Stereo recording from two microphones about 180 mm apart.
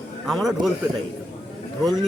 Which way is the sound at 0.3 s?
Centre (ahead or behind).